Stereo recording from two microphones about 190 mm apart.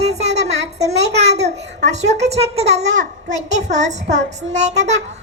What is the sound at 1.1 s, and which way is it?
A child's voice, 35° right (ahead or behind).